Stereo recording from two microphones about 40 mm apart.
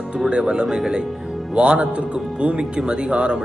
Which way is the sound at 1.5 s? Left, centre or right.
Right.